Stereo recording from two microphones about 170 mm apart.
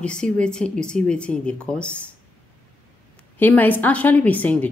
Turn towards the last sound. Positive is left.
turn(degrees=10)  # may be behind; listen again after turning